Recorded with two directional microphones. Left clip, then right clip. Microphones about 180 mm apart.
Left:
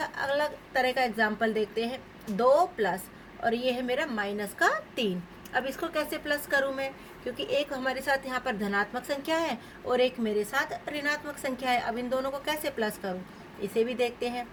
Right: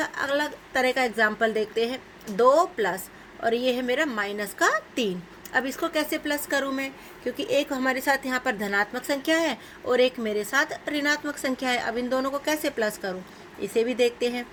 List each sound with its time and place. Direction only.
0.0 s a woman's voice: 45° right (ahead or behind)